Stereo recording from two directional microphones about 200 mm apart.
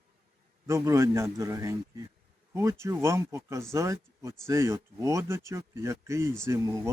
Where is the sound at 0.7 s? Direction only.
15° right (ahead or behind).